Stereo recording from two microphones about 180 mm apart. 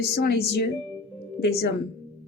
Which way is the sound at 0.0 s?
60° left (ahead or behind).